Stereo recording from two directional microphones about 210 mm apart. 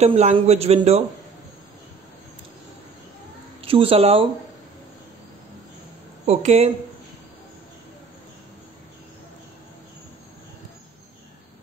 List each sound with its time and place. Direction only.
0.0 s a man's voice: 30° right (ahead or behind)
3.6 s speech: 25° right (ahead or behind)
6.2 s a man's voice: 30° right (ahead or behind)